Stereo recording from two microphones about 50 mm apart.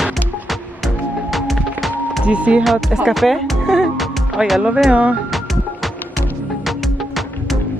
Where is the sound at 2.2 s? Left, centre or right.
Right.